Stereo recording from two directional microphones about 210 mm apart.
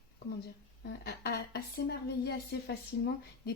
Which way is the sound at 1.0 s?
50° left (ahead or behind).